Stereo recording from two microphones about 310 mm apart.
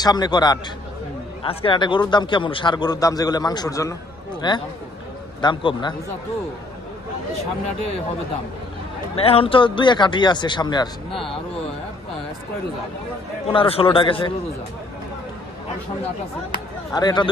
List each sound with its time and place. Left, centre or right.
0.0 s a man's voice: centre
9.1 s a man's voice: centre
13.5 s a man's voice: centre
16.9 s a man's voice: centre